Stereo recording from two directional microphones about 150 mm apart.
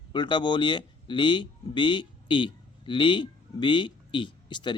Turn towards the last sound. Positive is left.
turn(degrees=30)  # may be behind; listen again after turning